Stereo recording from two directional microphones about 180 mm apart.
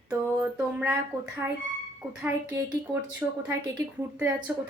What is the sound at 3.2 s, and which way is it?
Speech, 10° right (ahead or behind).